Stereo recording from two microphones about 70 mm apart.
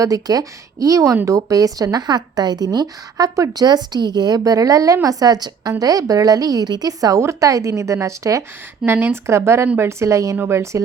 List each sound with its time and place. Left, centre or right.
0.0 s a woman's voice: right
5.0 s a woman's voice: right
7.2 s speech: right
8.9 s speech: right